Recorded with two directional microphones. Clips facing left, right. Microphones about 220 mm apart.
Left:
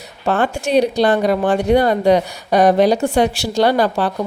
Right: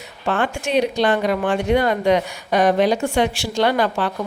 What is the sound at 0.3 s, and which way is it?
Speech, 35° left (ahead or behind).